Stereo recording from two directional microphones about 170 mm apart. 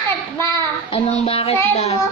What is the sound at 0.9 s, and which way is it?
Speech, 35° left (ahead or behind).